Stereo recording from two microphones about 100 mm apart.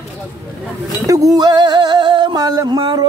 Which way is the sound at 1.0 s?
35° right (ahead or behind).